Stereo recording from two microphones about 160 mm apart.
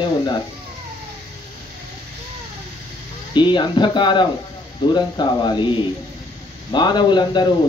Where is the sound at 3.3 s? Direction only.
30° left (ahead or behind).